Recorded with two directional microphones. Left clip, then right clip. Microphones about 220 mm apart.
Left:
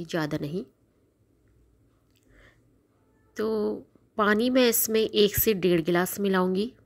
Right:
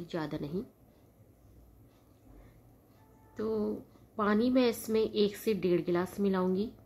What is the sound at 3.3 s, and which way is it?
A woman's voice, 35° left (ahead or behind).